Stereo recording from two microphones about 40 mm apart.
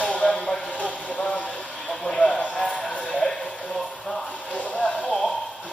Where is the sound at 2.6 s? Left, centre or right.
Left.